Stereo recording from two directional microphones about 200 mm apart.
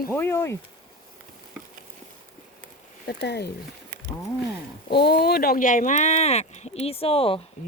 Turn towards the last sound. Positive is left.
turn(degrees=30)  # may be behind; listen again after turning